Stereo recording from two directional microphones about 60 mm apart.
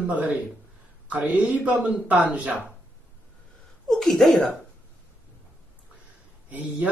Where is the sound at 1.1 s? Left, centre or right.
Centre.